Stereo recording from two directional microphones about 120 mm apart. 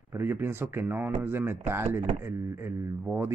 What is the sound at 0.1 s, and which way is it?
Speech, 20° right (ahead or behind).